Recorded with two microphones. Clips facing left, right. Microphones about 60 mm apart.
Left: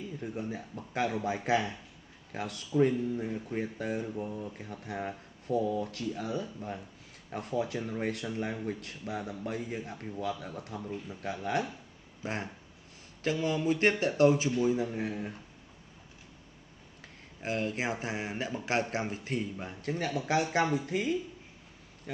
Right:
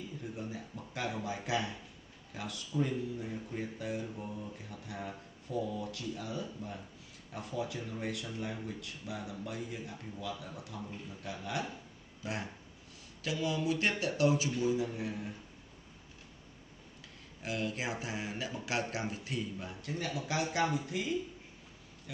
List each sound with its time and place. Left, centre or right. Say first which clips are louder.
0.2 s speech: left 6 dB; left
4.1 s speech: left 6 dB; left
4.6 s speech: left 6 dB; left
12.2 s speech: left 3 dB; left
17.4 s speech: left 4 dB; left